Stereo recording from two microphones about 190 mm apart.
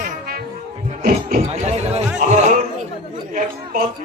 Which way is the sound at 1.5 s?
35° right (ahead or behind).